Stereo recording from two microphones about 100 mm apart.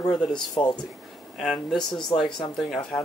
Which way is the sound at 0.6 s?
55° left (ahead or behind).